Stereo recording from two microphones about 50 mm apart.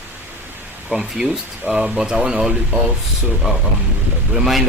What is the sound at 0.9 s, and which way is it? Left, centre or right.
Speech, centre.